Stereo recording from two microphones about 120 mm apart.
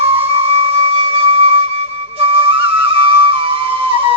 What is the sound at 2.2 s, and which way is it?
Flute, 50° right (ahead or behind).